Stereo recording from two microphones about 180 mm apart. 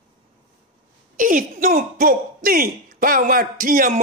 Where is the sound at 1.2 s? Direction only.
50° right (ahead or behind).